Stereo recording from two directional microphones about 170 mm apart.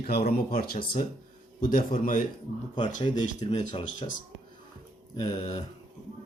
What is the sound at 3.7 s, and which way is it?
Mantra, 30° left (ahead or behind).